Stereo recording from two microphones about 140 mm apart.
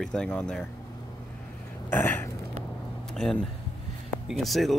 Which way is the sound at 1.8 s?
15° left (ahead or behind).